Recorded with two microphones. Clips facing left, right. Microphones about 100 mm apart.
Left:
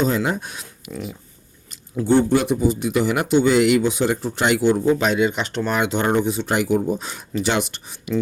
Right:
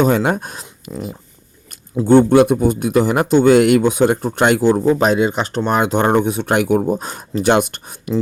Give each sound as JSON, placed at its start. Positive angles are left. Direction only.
{"t": 0.0, "sound": "speech", "side_deg": -60}
{"t": 2.0, "sound": "speech", "side_deg": -55}